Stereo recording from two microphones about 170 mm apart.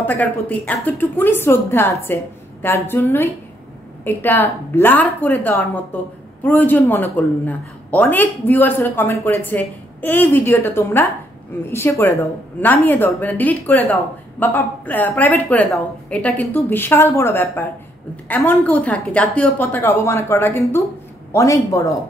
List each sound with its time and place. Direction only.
0.0 s a man's voice: 10° left (ahead or behind)